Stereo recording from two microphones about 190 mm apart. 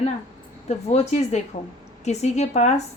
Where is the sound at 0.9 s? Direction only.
35° left (ahead or behind).